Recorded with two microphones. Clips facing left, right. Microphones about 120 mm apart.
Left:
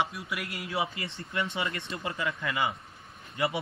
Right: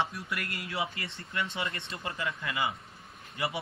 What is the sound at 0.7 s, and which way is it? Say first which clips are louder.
Speech: left 4 dB; 25° left (ahead or behind).